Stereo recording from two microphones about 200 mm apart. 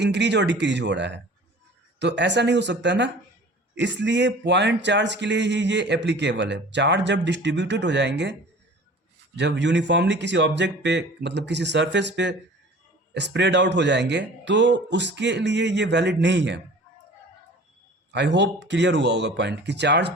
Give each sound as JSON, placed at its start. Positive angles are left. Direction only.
{"t": 0.0, "sound": "speech", "side_deg": -60}
{"t": 18.1, "sound": "speech", "side_deg": -60}